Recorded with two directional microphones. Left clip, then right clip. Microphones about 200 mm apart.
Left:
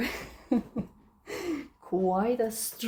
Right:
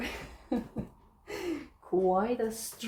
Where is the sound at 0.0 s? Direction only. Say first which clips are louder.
Left 5 dB; 55° left (ahead or behind).